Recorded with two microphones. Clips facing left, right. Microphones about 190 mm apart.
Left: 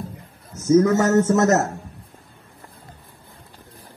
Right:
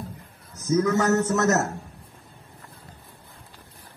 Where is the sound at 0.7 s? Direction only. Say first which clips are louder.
Left 5 dB; 25° left (ahead or behind).